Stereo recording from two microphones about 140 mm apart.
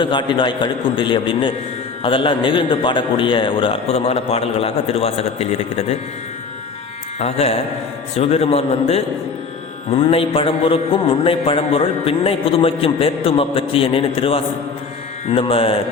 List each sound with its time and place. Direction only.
0.0 s a man's voice: 35° left (ahead or behind); by 6.0 s 50° left (ahead or behind)
7.2 s a man's voice: 50° left (ahead or behind)